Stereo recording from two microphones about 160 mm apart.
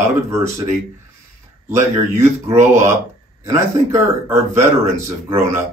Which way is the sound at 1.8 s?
15° right (ahead or behind).